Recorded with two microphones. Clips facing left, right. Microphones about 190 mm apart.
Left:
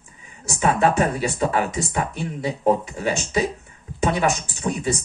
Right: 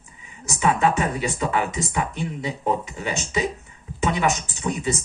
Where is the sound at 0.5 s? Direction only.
35° left (ahead or behind).